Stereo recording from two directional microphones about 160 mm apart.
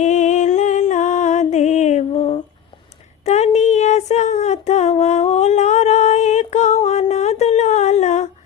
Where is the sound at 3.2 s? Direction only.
45° left (ahead or behind).